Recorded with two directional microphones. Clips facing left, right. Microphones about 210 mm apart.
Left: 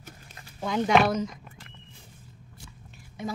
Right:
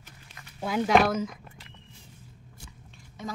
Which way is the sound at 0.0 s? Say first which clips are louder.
Left 4 dB; 40° left (ahead or behind).